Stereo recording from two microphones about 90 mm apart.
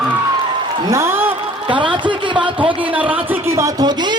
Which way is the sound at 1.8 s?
65° right (ahead or behind).